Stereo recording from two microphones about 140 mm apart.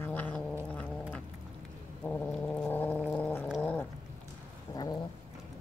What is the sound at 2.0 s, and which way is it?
Cat, 10° left (ahead or behind).